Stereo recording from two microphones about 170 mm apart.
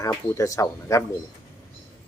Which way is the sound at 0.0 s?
20° left (ahead or behind).